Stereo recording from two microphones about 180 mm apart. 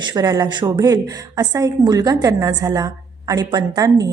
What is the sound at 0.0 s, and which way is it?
Speech, 25° right (ahead or behind).